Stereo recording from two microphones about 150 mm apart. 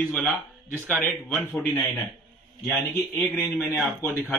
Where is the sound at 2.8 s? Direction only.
15° left (ahead or behind).